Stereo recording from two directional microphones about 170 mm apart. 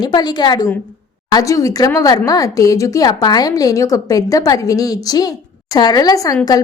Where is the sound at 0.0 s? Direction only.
25° left (ahead or behind).